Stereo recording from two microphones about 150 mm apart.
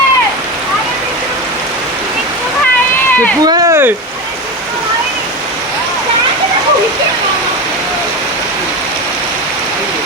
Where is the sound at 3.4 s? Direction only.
25° right (ahead or behind).